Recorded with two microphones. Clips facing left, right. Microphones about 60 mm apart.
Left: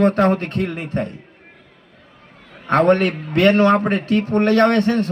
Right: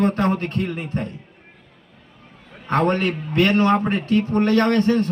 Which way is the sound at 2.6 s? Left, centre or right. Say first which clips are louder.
Left 5 dB; left.